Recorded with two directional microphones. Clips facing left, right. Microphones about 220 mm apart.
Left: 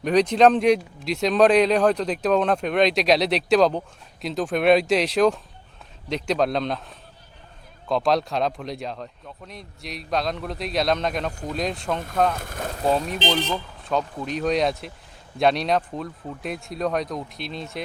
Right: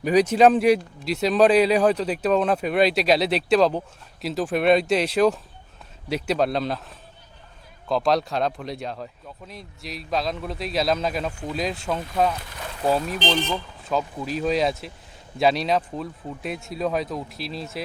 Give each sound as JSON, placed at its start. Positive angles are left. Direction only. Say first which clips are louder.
{"t": 0.0, "sound": "speech", "louder": "even", "side_deg": -5}
{"t": 12.4, "sound": "speech", "louder": "left 6 dB", "side_deg": 50}
{"t": 13.5, "sound": "speech", "louder": "even", "side_deg": -5}